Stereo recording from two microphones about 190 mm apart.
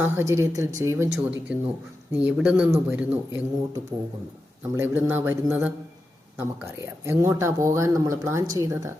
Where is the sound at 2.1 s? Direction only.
5° right (ahead or behind).